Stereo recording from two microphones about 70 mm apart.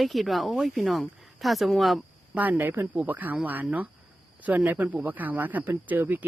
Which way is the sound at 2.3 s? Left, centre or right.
Right.